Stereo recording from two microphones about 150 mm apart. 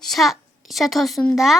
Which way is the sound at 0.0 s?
Centre (ahead or behind).